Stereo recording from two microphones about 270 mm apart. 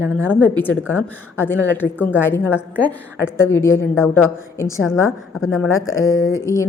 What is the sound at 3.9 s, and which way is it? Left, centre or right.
Speech, centre.